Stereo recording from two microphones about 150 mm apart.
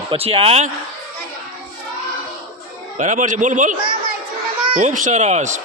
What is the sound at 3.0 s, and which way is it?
Speech, 55° right (ahead or behind).